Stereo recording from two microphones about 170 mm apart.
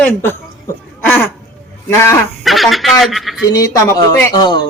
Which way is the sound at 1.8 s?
15° left (ahead or behind).